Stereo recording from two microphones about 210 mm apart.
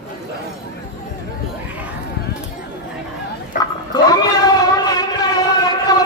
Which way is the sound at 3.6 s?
20° left (ahead or behind).